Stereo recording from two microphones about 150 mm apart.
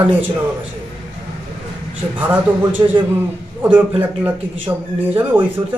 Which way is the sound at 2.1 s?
10° right (ahead or behind).